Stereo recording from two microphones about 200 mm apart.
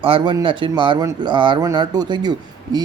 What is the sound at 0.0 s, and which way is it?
A man's voice, 25° right (ahead or behind).